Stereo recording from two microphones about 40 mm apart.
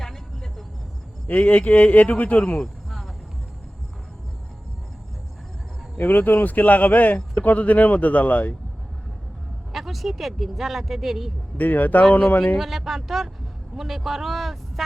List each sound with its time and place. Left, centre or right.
1.3 s speech: left
6.0 s speech: left
9.7 s speech: centre
11.5 s speech: left
12.5 s speech: centre